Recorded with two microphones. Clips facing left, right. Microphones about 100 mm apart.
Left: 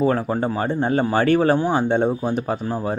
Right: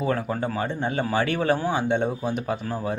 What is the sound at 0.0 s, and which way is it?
Speech, 35° left (ahead or behind).